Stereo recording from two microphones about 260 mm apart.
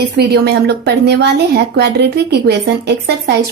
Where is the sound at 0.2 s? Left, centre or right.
Right.